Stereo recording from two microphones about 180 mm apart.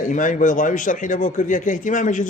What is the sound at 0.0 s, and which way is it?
A man's voice, 45° left (ahead or behind).